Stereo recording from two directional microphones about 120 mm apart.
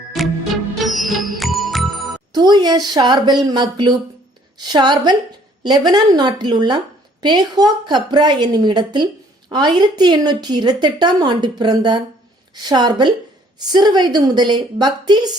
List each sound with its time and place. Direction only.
0.1 s music: centre (ahead or behind)
2.3 s a woman's voice: 35° right (ahead or behind)